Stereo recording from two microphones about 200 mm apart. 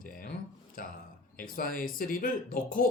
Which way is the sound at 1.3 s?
45° left (ahead or behind).